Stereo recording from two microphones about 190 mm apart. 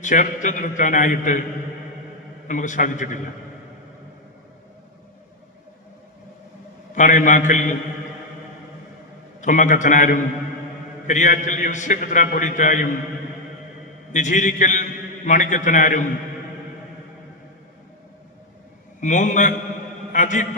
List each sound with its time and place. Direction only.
0.0 s a man's voice: 40° left (ahead or behind)
2.5 s a man's voice: 40° left (ahead or behind)
6.9 s a man's voice: 40° left (ahead or behind)
9.4 s a man's voice: 40° left (ahead or behind)
14.1 s a man's voice: 40° left (ahead or behind)
18.9 s a man's voice: 40° left (ahead or behind)